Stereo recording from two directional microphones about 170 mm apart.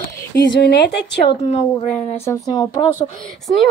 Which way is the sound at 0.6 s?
85° left.